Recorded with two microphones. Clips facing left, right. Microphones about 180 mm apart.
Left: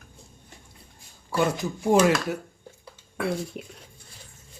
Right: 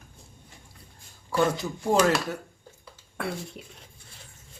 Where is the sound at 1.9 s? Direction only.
10° left (ahead or behind).